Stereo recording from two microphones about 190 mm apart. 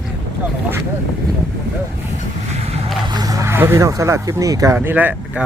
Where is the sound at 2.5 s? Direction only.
35° right (ahead or behind).